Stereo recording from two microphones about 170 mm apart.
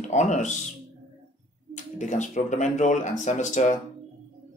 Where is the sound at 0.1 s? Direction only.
45° left (ahead or behind).